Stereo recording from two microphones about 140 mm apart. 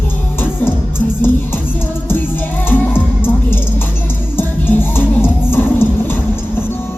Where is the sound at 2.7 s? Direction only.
15° left (ahead or behind).